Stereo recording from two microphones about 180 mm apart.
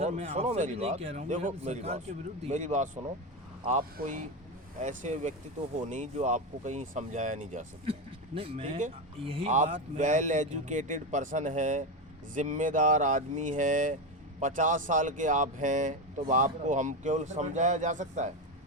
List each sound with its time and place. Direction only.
0.0 s speech: 40° right (ahead or behind)
9.5 s speech: 40° right (ahead or behind)